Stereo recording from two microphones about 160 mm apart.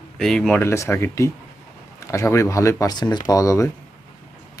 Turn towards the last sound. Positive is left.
turn(degrees=20)  # may be behind; listen again after turning